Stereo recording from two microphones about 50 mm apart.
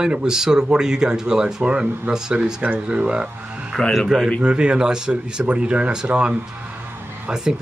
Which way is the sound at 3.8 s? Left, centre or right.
Centre.